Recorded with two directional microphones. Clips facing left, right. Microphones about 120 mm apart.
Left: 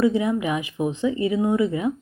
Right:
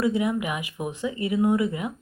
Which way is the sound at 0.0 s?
30° left (ahead or behind).